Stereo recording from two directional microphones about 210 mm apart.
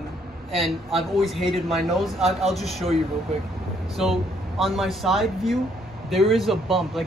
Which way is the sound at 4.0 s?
Centre (ahead or behind).